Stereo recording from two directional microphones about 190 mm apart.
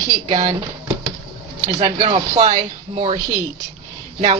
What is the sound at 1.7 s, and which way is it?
Speech, 30° right (ahead or behind).